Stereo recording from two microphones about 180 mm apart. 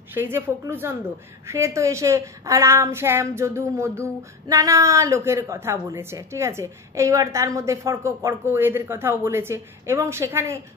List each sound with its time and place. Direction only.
0.1 s a woman's voice: 10° right (ahead or behind)